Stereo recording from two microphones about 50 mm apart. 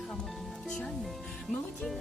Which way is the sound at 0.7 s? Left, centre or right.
Centre.